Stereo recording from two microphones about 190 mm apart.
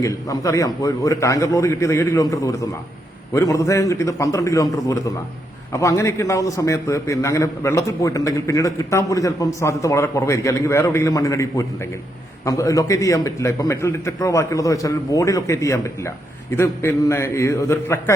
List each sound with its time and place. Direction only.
0.0 s a man's voice: 15° left (ahead or behind)